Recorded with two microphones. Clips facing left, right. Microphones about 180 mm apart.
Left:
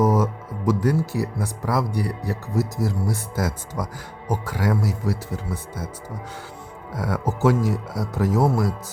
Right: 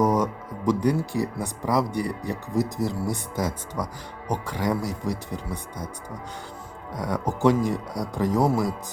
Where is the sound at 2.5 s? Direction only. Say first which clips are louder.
Even; 15° right (ahead or behind).